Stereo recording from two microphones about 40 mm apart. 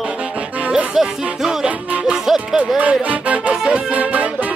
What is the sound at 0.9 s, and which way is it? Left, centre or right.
Music, centre.